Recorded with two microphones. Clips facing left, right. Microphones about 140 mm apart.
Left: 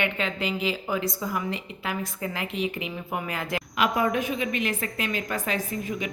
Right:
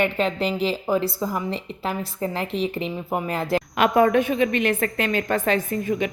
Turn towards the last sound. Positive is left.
turn(degrees=-55)  # may be behind; listen again after turning